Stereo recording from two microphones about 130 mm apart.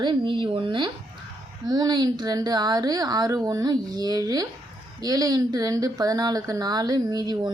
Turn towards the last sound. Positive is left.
turn(degrees=-30)  # may be behind; listen again after turning